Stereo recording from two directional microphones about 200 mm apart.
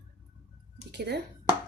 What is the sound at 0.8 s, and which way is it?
Speech, 55° right (ahead or behind).